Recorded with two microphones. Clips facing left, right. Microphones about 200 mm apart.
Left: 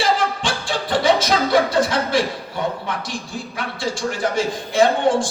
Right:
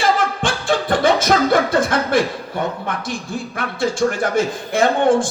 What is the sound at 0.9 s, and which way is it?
Chuckle, 55° right (ahead or behind).